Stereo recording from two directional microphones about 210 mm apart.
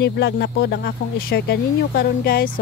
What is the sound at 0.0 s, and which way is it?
Speech, 55° left (ahead or behind).